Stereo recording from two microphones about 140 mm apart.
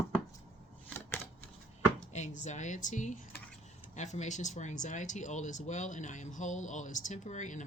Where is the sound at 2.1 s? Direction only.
55° left (ahead or behind).